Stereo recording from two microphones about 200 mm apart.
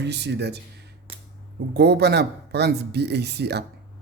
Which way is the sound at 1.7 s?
55° right (ahead or behind).